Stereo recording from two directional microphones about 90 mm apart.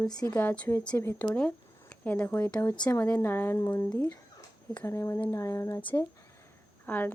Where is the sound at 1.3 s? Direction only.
15° left (ahead or behind).